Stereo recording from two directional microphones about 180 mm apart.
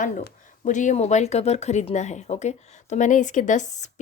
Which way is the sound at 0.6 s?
45° left (ahead or behind).